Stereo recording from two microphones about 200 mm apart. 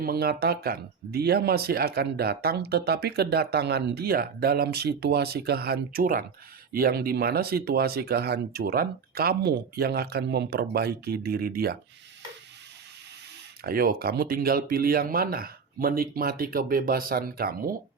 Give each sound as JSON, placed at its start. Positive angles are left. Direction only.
{"t": 0.0, "sound": "speech", "side_deg": -50}
{"t": 13.6, "sound": "speech", "side_deg": -50}